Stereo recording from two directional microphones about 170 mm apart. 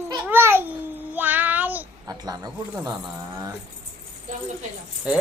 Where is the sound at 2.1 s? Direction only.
25° right (ahead or behind).